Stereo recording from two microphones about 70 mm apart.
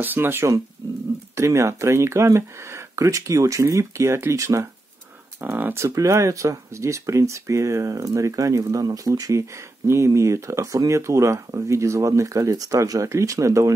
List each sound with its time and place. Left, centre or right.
0.0 s speech: right
0.8 s speech: right
1.3 s speech: right
5.4 s speech: right
5.8 s speech: right